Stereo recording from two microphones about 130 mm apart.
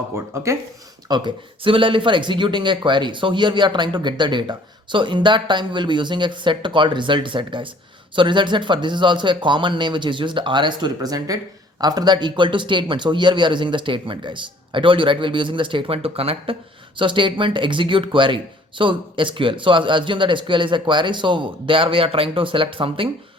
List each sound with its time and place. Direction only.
0.3 s speech: 20° right (ahead or behind)
1.0 s speech: 35° right (ahead or behind)